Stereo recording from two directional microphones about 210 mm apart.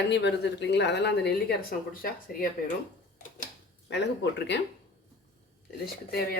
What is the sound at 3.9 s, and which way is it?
Speech, 55° left (ahead or behind).